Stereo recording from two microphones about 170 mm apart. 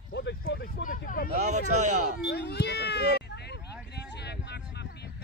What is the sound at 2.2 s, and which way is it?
Cat, 75° left (ahead or behind).